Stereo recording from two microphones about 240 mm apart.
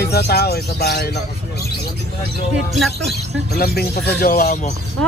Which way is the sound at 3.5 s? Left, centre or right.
Left.